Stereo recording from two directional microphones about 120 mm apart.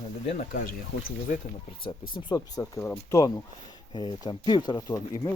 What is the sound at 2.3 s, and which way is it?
Speech, 25° left (ahead or behind).